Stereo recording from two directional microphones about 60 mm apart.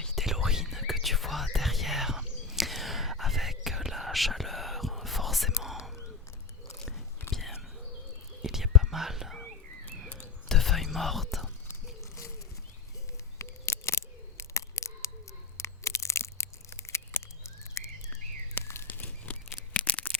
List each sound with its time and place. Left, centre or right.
0.0 s whispering: centre
0.3 s whispering: centre
7.3 s whispering: centre
10.5 s whispering: centre
13.4 s camera: left
15.5 s crushing: left
18.6 s a sound: left
18.9 s a sound: left